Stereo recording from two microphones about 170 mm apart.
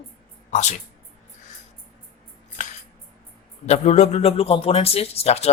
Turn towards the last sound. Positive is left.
turn(degrees=40)  # may be behind; listen again after turning